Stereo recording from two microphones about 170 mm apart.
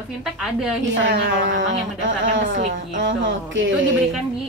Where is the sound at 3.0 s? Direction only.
90° right.